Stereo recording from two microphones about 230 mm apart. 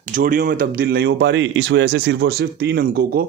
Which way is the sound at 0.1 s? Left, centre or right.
Right.